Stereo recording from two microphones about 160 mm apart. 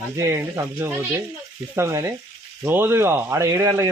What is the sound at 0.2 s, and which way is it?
Speech, 20° right (ahead or behind).